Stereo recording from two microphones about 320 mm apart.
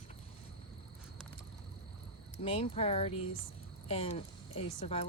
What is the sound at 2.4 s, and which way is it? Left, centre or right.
Speech, centre.